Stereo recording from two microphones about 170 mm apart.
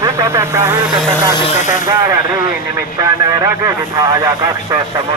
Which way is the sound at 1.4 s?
45° left (ahead or behind).